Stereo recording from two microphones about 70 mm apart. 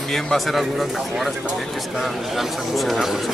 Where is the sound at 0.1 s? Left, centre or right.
Centre.